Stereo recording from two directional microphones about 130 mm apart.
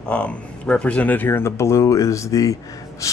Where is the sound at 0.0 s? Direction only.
10° left (ahead or behind).